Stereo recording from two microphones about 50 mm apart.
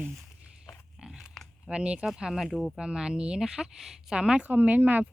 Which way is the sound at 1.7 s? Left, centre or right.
Right.